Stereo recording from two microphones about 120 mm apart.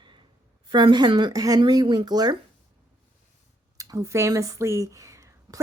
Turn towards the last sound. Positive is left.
turn(degrees=-25)  # may be behind; listen again after turning